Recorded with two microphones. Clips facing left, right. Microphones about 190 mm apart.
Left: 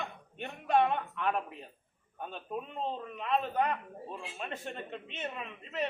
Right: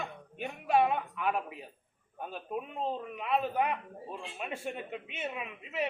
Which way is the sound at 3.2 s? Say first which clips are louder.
Even; 10° right (ahead or behind).